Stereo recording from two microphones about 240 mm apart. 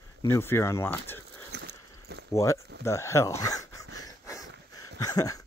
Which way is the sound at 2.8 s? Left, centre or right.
Centre.